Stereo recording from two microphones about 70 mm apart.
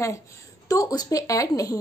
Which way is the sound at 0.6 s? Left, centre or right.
Left.